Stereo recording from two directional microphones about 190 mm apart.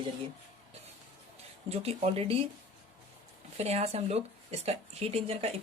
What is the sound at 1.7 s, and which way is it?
Speech, 30° right (ahead or behind).